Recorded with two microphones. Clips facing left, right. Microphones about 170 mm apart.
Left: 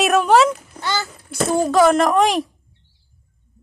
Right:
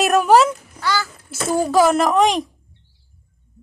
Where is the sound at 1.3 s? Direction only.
5° right (ahead or behind).